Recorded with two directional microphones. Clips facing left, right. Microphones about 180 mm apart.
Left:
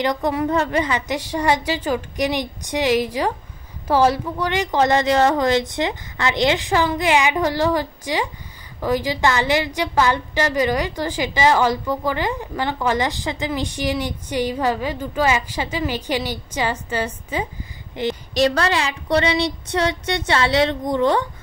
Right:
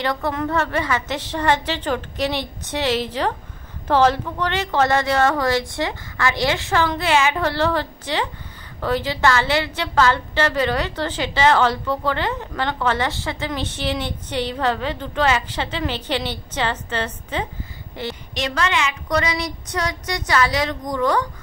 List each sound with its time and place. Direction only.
0.0 s a woman's voice: 20° left (ahead or behind)
18.3 s a woman's voice: 40° left (ahead or behind)